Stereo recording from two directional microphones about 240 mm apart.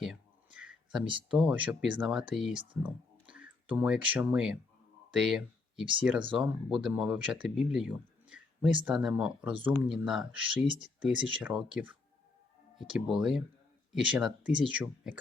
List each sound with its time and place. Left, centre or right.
0.0 s a sound: centre
1.3 s speech: centre
10.7 s speech: centre
11.0 s speech: centre